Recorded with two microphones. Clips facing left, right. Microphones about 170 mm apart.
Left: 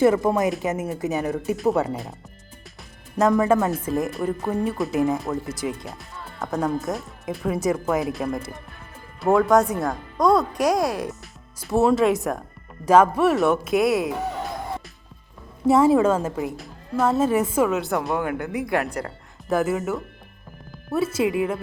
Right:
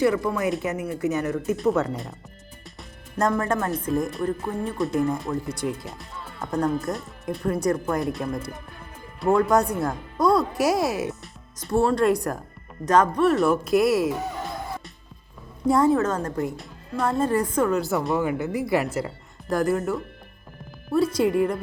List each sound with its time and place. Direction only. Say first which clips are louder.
0.3 s speech: left 3 dB; 20° left (ahead or behind)
3.2 s a woman's voice: left 5 dB; 5° left (ahead or behind)
15.6 s a woman's voice: left 3 dB; 5° left (ahead or behind)